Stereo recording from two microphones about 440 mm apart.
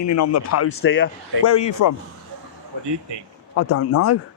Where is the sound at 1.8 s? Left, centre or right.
Left.